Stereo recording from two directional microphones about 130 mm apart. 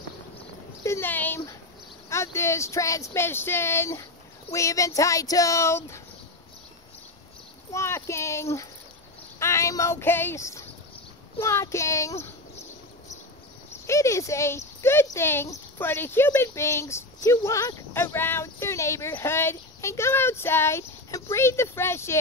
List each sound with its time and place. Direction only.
0.8 s speech: 20° left (ahead or behind)
7.7 s speech: 20° left (ahead or behind)
13.8 s speech: 25° left (ahead or behind)
14.8 s a sound: 20° left (ahead or behind)
15.0 s speech: 20° left (ahead or behind)